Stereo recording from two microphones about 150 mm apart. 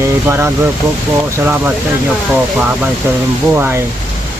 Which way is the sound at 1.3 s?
15° right (ahead or behind).